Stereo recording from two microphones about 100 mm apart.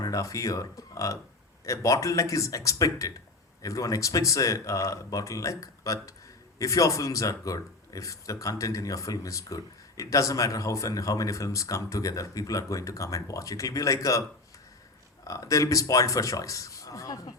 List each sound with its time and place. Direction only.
0.0 s speech: 35° left (ahead or behind)
15.3 s speech: 35° left (ahead or behind)